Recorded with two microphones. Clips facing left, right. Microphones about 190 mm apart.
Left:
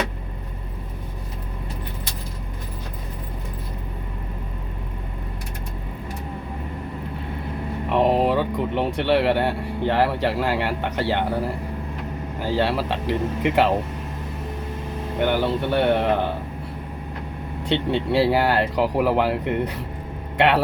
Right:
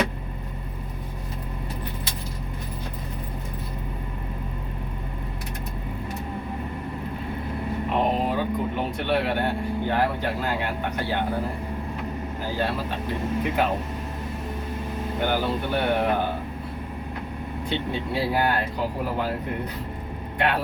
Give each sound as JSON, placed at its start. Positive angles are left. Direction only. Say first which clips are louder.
{"t": 7.9, "sound": "speech", "louder": "left 6 dB", "side_deg": 75}
{"t": 12.5, "sound": "speech", "louder": "left 5 dB", "side_deg": 90}
{"t": 15.3, "sound": "a man's voice", "louder": "left 4 dB", "side_deg": 70}
{"t": 17.7, "sound": "speech", "louder": "left 7 dB", "side_deg": 80}